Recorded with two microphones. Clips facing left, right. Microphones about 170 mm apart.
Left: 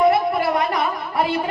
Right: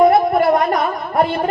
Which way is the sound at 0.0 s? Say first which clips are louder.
Right 5 dB; 50° right (ahead or behind).